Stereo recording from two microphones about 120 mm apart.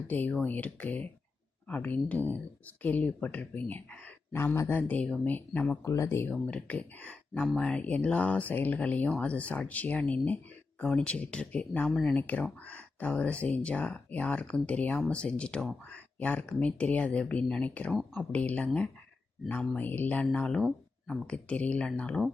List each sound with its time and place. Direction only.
0.1 s speech: 15° left (ahead or behind)
5.8 s speech: 25° left (ahead or behind); by 22.2 s 10° left (ahead or behind)